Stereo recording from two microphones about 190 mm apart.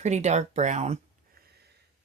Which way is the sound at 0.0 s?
35° right (ahead or behind).